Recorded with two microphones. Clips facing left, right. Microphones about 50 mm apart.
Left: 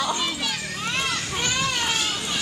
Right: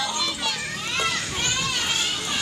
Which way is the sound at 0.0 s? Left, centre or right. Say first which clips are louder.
Left 2 dB; left.